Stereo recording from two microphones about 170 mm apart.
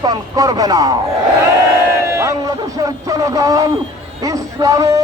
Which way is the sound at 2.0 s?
15° right (ahead or behind).